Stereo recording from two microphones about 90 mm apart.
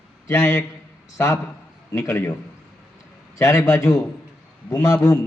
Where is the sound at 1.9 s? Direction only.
30° left (ahead or behind).